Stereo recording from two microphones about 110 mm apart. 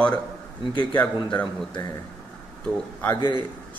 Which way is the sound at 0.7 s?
45° left (ahead or behind).